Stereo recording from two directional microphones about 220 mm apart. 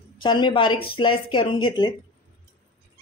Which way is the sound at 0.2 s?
20° left (ahead or behind).